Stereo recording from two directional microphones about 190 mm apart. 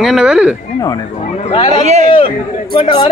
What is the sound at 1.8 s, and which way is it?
Speech, 35° right (ahead or behind).